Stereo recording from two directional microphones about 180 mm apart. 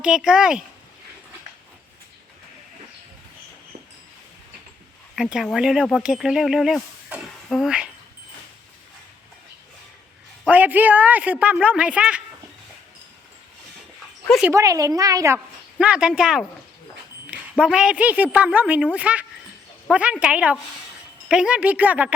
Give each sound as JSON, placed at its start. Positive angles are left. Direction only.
{"t": 0.0, "sound": "speech", "side_deg": -5}
{"t": 5.1, "sound": "speech", "side_deg": 0}
{"t": 10.4, "sound": "speech", "side_deg": -10}
{"t": 14.3, "sound": "speech", "side_deg": 0}
{"t": 14.5, "sound": "a woman's voice", "side_deg": -20}
{"t": 15.8, "sound": "speech", "side_deg": -5}
{"t": 17.6, "sound": "speech", "side_deg": -5}